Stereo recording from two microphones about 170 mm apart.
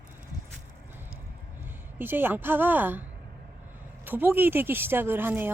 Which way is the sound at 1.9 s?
10° right (ahead or behind).